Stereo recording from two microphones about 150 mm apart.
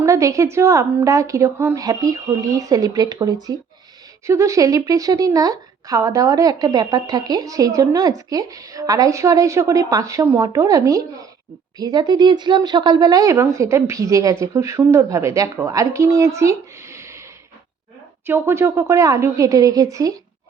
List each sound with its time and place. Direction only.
0.0 s speech: 20° right (ahead or behind)
18.3 s speech: 15° right (ahead or behind)